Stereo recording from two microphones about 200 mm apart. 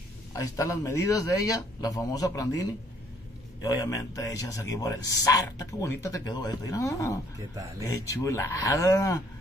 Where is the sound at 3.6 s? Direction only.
15° left (ahead or behind).